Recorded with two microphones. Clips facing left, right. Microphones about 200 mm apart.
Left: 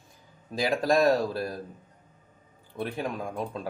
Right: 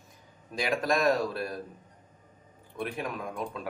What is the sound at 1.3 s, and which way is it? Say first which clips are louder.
Speech: left 2 dB; 30° left (ahead or behind).